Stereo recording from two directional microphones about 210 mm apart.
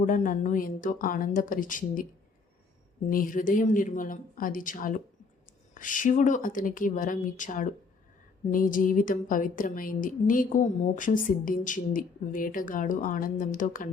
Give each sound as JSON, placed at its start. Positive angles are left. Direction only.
{"t": 0.0, "sound": "a woman's voice", "side_deg": 40}
{"t": 3.1, "sound": "a woman's voice", "side_deg": 40}